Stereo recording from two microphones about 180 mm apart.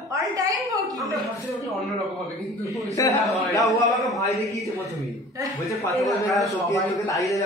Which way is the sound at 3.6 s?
Centre (ahead or behind).